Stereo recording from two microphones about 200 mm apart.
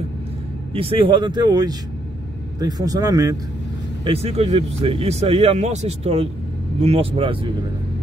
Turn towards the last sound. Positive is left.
turn(degrees=-25)  # may be behind; listen again after turning